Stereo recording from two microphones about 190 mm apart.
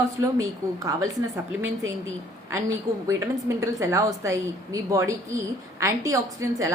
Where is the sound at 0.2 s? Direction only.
15° right (ahead or behind).